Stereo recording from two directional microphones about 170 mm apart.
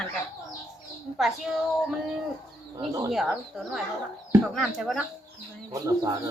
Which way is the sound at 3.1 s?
Centre (ahead or behind).